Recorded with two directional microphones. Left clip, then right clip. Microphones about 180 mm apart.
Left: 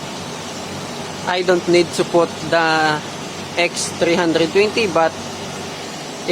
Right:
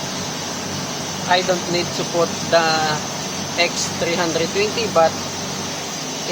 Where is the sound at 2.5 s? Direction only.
30° left (ahead or behind).